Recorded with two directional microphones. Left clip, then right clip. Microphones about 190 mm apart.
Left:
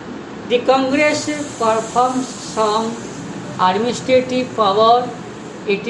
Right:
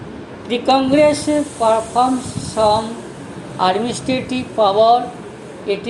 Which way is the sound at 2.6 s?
40° right (ahead or behind).